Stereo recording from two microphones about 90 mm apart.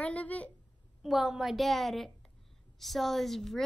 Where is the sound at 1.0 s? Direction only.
5° right (ahead or behind).